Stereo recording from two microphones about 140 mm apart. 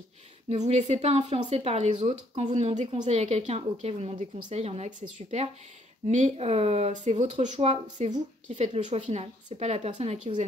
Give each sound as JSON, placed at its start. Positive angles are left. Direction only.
{"t": 0.5, "sound": "speech", "side_deg": -50}